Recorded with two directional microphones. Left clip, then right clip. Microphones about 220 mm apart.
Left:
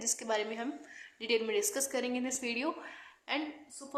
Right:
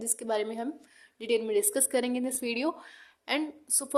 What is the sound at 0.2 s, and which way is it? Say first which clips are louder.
A woman's voice: right 7 dB; 35° right (ahead or behind).